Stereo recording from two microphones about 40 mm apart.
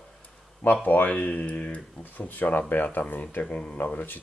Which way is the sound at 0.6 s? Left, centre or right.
Left.